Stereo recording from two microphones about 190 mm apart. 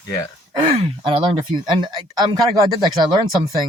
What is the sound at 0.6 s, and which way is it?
Speech, 30° right (ahead or behind).